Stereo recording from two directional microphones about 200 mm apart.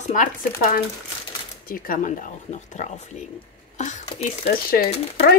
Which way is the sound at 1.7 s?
45° left (ahead or behind).